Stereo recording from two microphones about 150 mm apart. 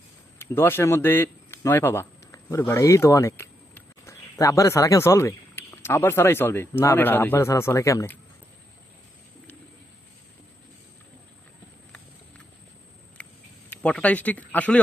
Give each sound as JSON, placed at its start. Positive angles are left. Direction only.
{"t": 0.3, "sound": "speech", "side_deg": 15}
{"t": 13.2, "sound": "a sound", "side_deg": 10}
{"t": 13.7, "sound": "speech", "side_deg": 10}